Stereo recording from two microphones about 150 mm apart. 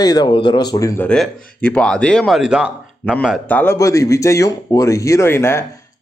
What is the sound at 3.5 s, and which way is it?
Speech, 15° left (ahead or behind).